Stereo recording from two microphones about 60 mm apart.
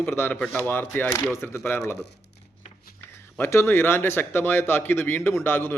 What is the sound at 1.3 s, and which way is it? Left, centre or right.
Speech, left.